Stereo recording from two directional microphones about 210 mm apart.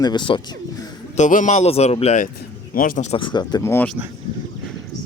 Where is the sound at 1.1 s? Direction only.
35° left (ahead or behind).